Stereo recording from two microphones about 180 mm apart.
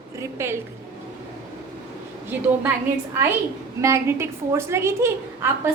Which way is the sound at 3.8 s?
15° right (ahead or behind).